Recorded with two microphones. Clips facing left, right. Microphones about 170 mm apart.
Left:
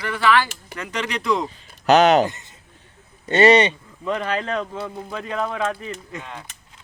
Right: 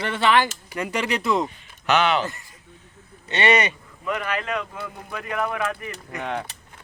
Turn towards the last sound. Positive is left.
turn(degrees=-65)  # may be behind; listen again after turning